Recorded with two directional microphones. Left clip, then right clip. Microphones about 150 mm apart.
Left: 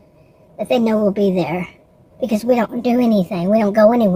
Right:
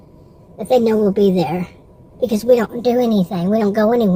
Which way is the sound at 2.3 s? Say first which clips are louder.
Right 2 dB; 35° left (ahead or behind).